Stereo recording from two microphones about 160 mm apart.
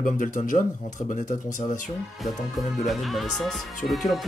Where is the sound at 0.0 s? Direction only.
55° left (ahead or behind).